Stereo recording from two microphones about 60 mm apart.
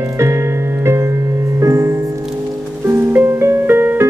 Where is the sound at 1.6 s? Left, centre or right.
Right.